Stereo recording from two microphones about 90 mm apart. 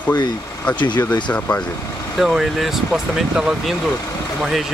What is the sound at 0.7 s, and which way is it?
Speech, 60° left (ahead or behind).